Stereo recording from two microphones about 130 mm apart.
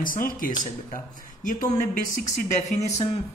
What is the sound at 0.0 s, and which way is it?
Speech, 90° left.